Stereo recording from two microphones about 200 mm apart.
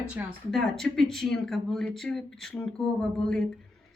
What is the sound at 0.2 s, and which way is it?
Speech, 10° right (ahead or behind).